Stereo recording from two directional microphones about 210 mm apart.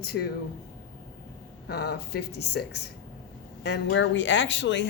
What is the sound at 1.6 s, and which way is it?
Speech, 50° left (ahead or behind).